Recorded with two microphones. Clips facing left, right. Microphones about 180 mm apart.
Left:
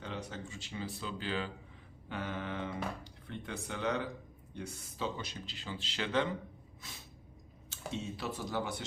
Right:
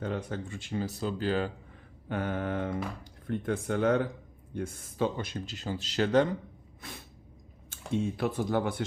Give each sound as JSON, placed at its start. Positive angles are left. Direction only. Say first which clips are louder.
{"t": 0.0, "sound": "speech", "louder": "right 8 dB", "side_deg": -50}
{"t": 6.8, "sound": "speech", "louder": "right 8 dB", "side_deg": -60}